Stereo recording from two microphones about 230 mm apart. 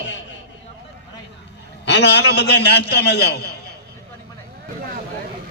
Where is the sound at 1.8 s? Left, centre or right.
Left.